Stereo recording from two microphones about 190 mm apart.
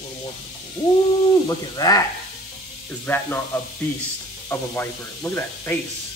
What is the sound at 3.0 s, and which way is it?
Speech, 10° left (ahead or behind).